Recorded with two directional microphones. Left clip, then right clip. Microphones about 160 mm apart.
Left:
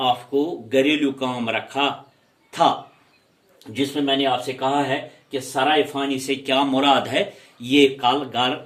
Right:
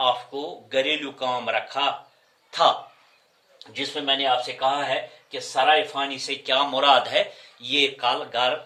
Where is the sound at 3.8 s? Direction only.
20° right (ahead or behind).